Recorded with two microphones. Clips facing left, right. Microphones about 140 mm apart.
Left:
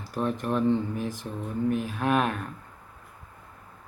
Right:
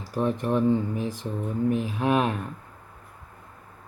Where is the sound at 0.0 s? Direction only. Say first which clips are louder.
Right 3 dB; 15° right (ahead or behind).